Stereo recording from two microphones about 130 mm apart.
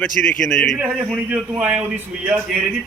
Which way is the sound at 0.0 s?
5° left (ahead or behind).